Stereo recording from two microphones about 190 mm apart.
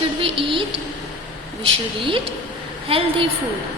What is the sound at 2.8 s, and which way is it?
Speech, 30° right (ahead or behind).